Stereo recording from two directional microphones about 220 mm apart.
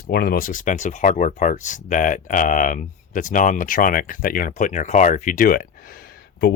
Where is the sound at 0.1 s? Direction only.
45° left (ahead or behind).